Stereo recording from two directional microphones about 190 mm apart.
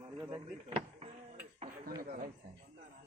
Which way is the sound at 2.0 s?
40° right (ahead or behind).